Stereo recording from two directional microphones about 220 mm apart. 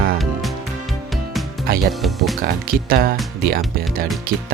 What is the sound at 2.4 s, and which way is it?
Speech, 40° right (ahead or behind).